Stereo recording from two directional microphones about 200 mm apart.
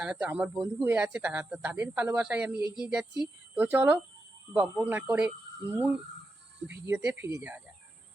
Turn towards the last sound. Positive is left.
turn(degrees=-10)  # may be behind; listen again after turning